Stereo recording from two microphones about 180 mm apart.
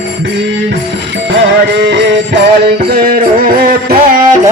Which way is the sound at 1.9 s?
75° right (ahead or behind).